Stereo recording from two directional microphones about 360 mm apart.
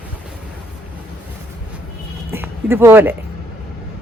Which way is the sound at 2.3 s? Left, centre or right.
Centre.